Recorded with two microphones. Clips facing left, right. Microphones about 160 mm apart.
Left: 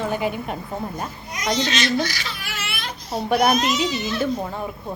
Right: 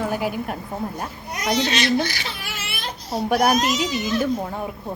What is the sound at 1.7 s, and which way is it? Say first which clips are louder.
Speech: right 1 dB; 60° right (ahead or behind).